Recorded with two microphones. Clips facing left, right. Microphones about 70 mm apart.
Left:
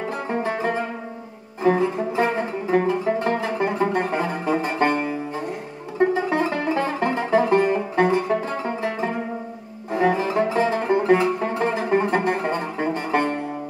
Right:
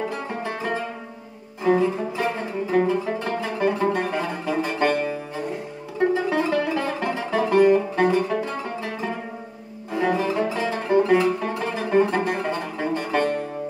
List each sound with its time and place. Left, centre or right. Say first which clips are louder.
0.3 s music: left 4 dB; left
6.3 s music: even; left
9.8 s bowed string instrument: left 2 dB; left
10.3 s music: left 4 dB; left